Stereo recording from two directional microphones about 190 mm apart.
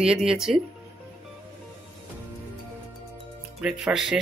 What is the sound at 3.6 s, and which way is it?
Speech, 5° right (ahead or behind).